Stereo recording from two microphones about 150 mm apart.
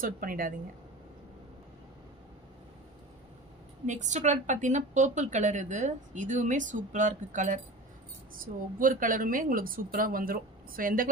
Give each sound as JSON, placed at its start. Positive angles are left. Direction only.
{"t": 0.0, "sound": "speech", "side_deg": -70}
{"t": 3.8, "sound": "a woman's voice", "side_deg": -55}
{"t": 8.7, "sound": "speech", "side_deg": -65}